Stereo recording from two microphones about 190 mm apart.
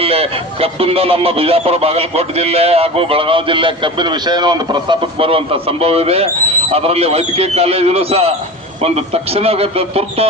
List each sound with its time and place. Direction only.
0.0 s speech: 30° right (ahead or behind)